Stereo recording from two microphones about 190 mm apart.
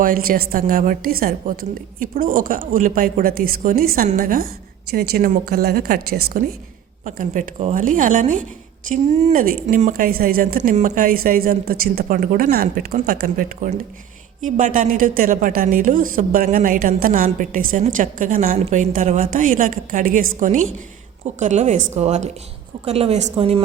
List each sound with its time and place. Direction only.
0.0 s a woman's voice: 50° right (ahead or behind)
7.0 s a woman's voice: 40° right (ahead or behind)